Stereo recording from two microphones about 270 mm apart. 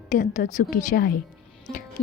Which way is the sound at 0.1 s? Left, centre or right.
Left.